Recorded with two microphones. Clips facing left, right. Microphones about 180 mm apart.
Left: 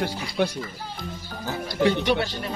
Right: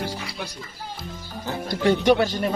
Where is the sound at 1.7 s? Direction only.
45° right (ahead or behind).